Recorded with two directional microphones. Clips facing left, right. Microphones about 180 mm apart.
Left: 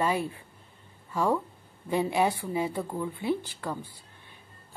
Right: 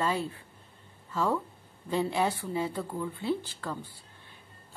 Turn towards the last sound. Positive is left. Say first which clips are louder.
# left 2 dB
turn(degrees=15)  # may be behind; listen again after turning